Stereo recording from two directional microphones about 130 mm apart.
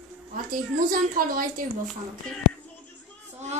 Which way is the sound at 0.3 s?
90° right.